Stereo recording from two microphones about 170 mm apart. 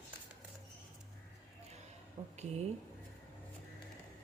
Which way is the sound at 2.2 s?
40° right (ahead or behind).